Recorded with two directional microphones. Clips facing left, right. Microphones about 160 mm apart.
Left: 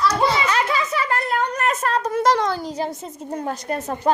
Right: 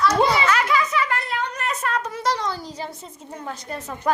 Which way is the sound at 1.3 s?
50° left (ahead or behind).